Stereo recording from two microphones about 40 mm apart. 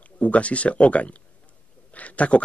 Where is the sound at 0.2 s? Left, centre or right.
Left.